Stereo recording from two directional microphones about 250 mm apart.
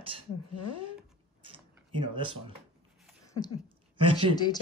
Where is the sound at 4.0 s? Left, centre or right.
Right.